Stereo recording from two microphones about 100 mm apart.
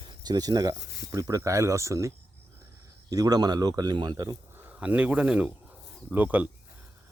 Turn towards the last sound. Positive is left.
turn(degrees=-15)  # may be behind; listen again after turning